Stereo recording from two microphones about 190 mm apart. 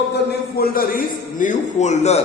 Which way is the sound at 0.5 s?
50° left (ahead or behind).